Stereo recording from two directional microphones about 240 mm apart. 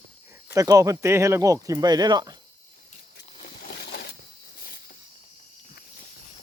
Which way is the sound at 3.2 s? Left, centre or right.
Left.